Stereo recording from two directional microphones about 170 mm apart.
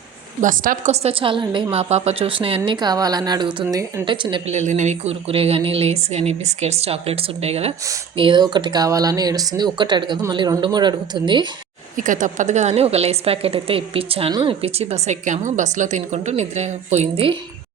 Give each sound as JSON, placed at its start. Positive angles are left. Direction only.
{"t": 0.4, "sound": "a woman's voice", "side_deg": -50}
{"t": 1.0, "sound": "speech", "side_deg": -30}
{"t": 4.5, "sound": "a woman's voice", "side_deg": -45}
{"t": 11.9, "sound": "a woman's voice", "side_deg": -50}